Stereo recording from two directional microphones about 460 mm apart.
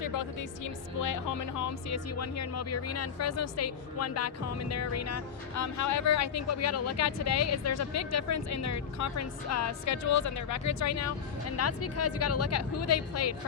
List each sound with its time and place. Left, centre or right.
0.0 s speech: left